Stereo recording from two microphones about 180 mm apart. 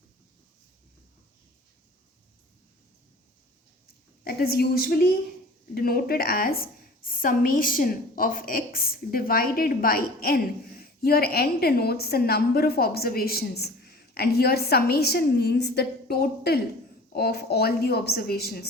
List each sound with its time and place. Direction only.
4.2 s a woman's voice: 60° left (ahead or behind)